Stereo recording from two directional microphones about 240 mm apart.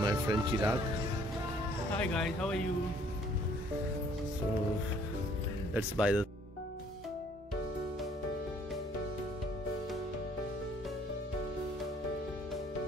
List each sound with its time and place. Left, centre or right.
0.0 s speech: centre
2.0 s speech: centre
5.8 s speech: centre